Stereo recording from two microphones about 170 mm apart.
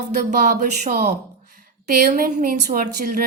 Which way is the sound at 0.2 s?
55° right (ahead or behind).